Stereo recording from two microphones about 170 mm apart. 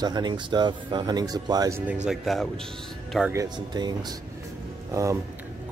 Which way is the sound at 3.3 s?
20° right (ahead or behind).